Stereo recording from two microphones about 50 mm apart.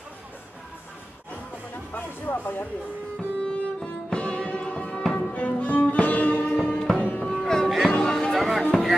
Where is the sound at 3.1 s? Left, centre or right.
Centre.